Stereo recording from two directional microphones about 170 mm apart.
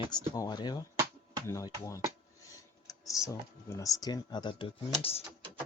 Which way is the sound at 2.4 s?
20° left (ahead or behind).